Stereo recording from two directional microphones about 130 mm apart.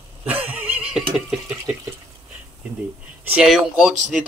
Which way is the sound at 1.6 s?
15° right (ahead or behind).